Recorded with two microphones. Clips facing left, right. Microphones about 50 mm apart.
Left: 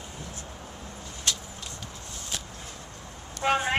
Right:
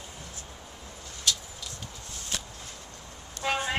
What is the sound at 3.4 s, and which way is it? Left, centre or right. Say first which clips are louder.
Vehicle: left 4 dB; left.